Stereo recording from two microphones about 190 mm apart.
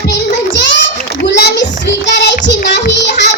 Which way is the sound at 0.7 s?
65° left (ahead or behind).